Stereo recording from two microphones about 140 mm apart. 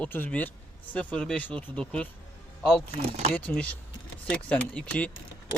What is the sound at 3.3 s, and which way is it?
Speech, 10° left (ahead or behind).